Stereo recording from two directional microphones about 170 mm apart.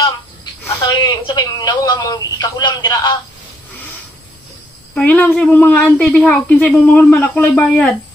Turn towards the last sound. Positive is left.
turn(degrees=5)  # may be behind; listen again after turning